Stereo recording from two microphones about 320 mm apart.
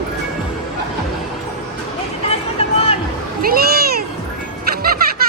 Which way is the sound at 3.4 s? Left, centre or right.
Right.